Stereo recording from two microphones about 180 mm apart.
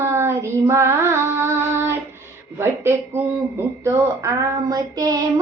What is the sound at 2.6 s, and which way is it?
Female singing, 15° right (ahead or behind).